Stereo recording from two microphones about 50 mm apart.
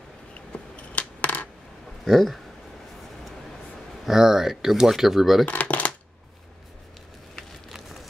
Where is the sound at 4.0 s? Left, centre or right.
Centre.